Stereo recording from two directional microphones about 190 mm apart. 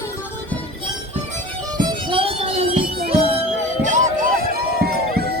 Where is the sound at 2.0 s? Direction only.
30° right (ahead or behind).